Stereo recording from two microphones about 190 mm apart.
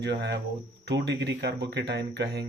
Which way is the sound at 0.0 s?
65° right (ahead or behind).